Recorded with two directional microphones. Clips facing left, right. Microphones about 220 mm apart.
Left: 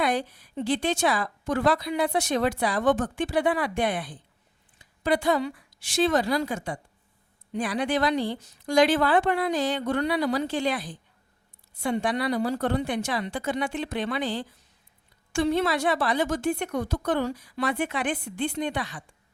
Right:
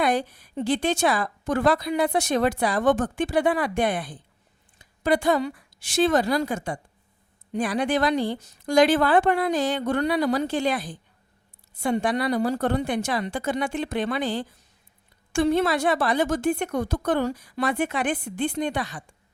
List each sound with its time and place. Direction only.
0.0 s a woman's voice: 45° right (ahead or behind)